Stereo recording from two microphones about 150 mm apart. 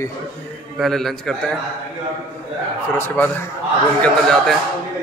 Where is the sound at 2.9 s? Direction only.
15° left (ahead or behind).